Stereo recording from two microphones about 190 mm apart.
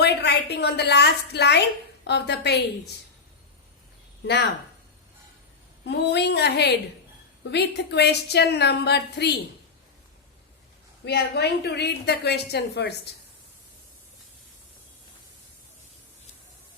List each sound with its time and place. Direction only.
0.0 s a woman's voice: 60° left (ahead or behind)
5.8 s a woman's voice: 65° left (ahead or behind)
11.0 s a woman's voice: 60° left (ahead or behind)